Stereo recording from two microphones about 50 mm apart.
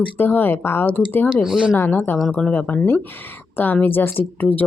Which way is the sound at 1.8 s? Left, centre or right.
Left.